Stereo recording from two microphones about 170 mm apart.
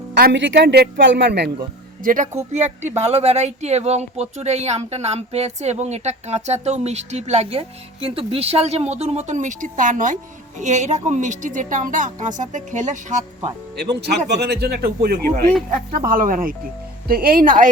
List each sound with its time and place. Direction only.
0.1 s a woman's voice: 85° right
2.0 s a woman's voice: 50° right (ahead or behind)
14.0 s speech: 75° right (ahead or behind)
15.7 s speech: 55° right (ahead or behind)